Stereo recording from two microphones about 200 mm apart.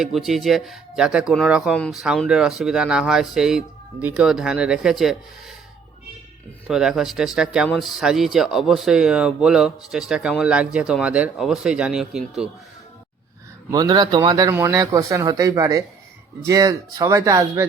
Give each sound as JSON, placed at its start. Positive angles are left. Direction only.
{"t": 0.0, "sound": "speech", "side_deg": 0}
{"t": 6.7, "sound": "speech", "side_deg": -5}
{"t": 13.7, "sound": "a man's voice", "side_deg": -15}